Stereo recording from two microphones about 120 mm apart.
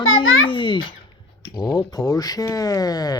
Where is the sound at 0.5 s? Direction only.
45° left (ahead or behind).